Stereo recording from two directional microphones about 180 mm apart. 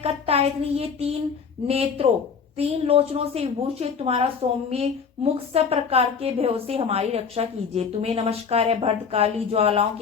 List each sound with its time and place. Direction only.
0.0 s a child's voice: 35° right (ahead or behind)